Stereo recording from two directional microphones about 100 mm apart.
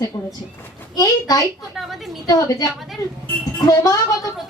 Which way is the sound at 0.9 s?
35° left (ahead or behind).